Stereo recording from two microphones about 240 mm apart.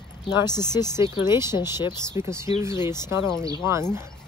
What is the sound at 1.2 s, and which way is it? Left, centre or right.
Speech, centre.